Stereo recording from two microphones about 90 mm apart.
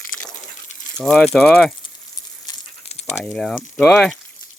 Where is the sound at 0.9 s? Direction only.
5° left (ahead or behind).